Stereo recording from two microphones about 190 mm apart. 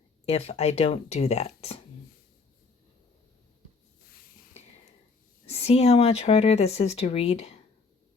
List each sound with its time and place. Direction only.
0.3 s speech: 35° left (ahead or behind)
5.5 s speech: 35° left (ahead or behind)